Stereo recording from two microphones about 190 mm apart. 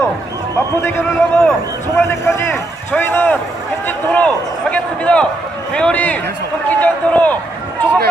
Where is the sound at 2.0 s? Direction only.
15° left (ahead or behind).